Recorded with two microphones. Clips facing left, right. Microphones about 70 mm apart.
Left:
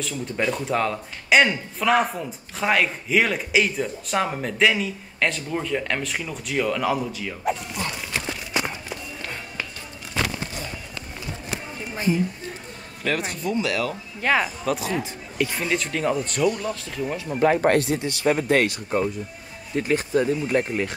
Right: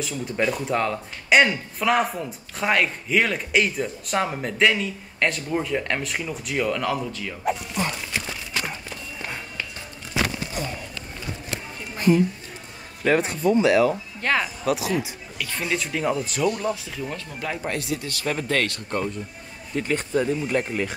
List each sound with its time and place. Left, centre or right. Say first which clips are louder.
0.0 s a man's voice: right 1 dB; centre
10.1 s a sound: right 1 dB; centre
13.3 s speech: right 6 dB; right
14.2 s a man's voice: left 2 dB; centre
14.7 s a man's voice: right 1 dB; centre
17.5 s speech: left 9 dB; left
17.9 s speech: left 5 dB; left
18.9 s a man's voice: left 3 dB; centre